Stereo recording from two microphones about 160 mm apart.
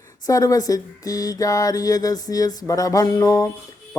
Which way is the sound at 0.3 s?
20° left (ahead or behind).